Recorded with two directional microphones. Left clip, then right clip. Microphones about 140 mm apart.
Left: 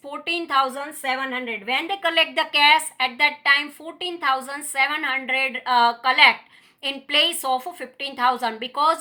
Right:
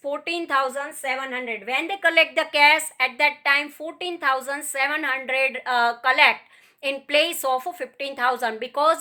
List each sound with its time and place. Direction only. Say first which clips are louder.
0.1 s a woman's voice: left 1 dB; 35° right (ahead or behind)